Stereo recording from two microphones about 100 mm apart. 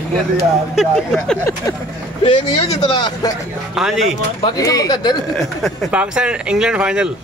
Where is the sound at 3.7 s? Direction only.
5° right (ahead or behind).